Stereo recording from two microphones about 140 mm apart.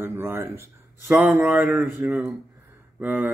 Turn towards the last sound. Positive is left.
turn(degrees=-15)  # may be behind; listen again after turning